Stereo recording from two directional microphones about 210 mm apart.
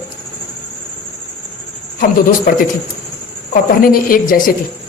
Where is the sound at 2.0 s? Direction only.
45° left (ahead or behind).